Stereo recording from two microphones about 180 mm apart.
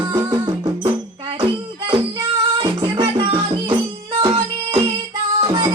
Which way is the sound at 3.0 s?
30° right (ahead or behind).